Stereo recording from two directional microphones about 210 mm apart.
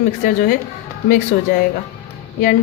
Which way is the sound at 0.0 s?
40° left (ahead or behind).